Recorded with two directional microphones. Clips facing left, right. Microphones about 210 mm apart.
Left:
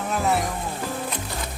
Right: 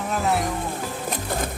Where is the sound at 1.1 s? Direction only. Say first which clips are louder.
Right 5 dB; 50° right (ahead or behind).